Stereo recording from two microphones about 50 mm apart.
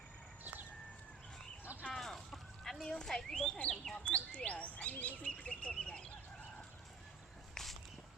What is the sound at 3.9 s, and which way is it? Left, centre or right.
Speech, left.